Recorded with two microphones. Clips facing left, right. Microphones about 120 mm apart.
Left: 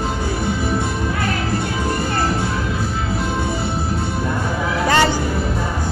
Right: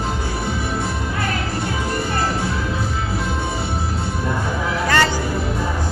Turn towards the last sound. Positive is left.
turn(degrees=15)  # may be behind; listen again after turning